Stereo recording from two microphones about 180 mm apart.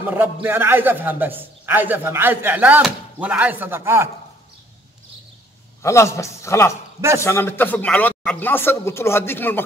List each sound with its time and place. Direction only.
0.0 s a man's voice: 10° right (ahead or behind)
5.8 s speech: 15° left (ahead or behind)